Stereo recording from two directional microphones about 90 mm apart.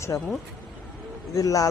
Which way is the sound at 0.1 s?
20° left (ahead or behind).